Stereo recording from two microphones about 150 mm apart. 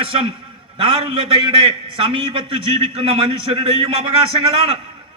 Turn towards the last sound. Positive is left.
turn(degrees=-40)  # may be behind; listen again after turning